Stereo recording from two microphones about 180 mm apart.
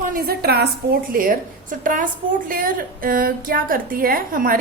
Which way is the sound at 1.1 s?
50° right (ahead or behind).